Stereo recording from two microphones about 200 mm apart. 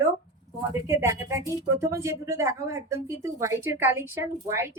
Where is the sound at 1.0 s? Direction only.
15° right (ahead or behind).